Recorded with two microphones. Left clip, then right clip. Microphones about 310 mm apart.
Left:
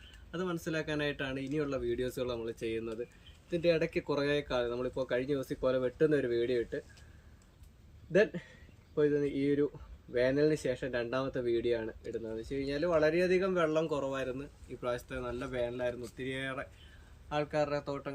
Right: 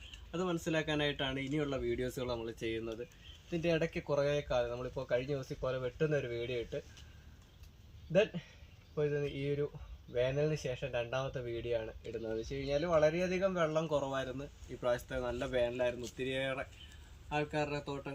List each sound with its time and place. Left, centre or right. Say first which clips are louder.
0.3 s speech: even; centre; by 6.5 s right
9.0 s speech: left 6 dB; right; by 18.1 s centre